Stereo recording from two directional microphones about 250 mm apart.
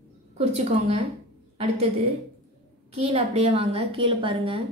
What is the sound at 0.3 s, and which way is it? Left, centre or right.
Speech, right.